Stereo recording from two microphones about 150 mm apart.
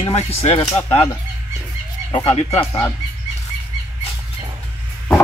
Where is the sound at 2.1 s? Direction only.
20° left (ahead or behind).